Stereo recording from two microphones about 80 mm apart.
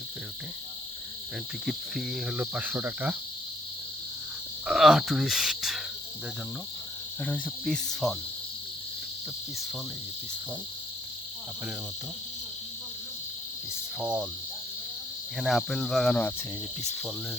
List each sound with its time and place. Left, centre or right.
1.6 s speech: centre
2.3 s cricket: centre
4.6 s speech: centre
7.3 s insect: centre
7.6 s speech: centre
14.0 s cricket: centre
15.4 s speech: centre